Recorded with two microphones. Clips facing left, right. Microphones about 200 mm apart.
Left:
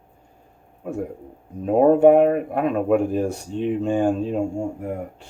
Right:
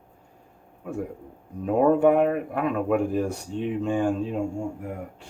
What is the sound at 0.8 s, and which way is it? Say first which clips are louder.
Speech: left 3 dB; 35° left (ahead or behind).